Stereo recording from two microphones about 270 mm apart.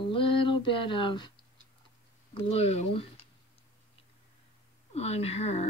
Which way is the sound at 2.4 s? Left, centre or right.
Left.